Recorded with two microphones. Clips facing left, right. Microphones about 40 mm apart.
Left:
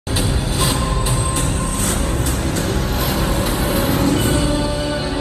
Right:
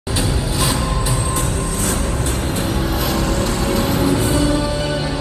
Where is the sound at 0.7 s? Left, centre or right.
Left.